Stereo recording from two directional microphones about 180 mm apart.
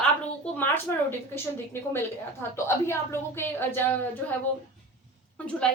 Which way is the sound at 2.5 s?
15° left (ahead or behind).